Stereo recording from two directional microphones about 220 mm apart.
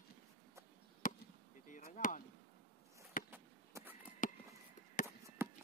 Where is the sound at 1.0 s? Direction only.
35° left (ahead or behind).